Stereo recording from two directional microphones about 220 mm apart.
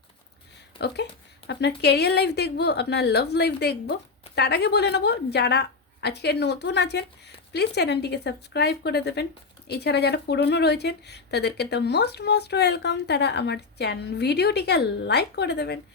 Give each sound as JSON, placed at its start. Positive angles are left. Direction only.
{"t": 1.5, "sound": "speech", "side_deg": 50}